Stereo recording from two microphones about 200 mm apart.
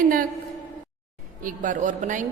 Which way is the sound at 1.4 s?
40° right (ahead or behind).